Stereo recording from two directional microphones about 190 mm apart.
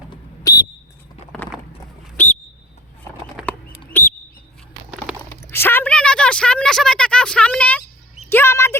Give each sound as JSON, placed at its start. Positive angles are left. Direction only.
{"t": 0.1, "sound": "whistle", "side_deg": 15}
{"t": 2.1, "sound": "bird", "side_deg": 10}
{"t": 3.9, "sound": "bird", "side_deg": 10}
{"t": 5.3, "sound": "a sound", "side_deg": 15}